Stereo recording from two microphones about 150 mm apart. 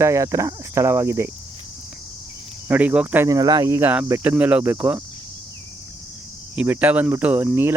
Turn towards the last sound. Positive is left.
turn(degrees=-15)  # may be behind; listen again after turning